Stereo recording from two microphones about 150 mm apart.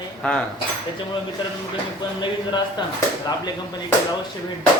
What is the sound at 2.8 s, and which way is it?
Speech, 30° left (ahead or behind).